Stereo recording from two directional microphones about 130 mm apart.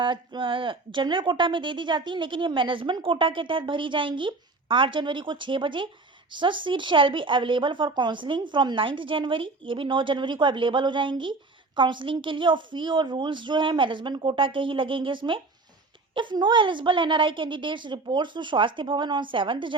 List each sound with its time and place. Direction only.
0.0 s a woman's voice: 40° right (ahead or behind)